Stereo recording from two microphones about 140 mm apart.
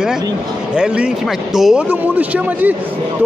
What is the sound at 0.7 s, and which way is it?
Speech, 5° right (ahead or behind).